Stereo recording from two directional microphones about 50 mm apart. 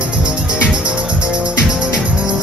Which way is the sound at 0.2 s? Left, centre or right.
Right.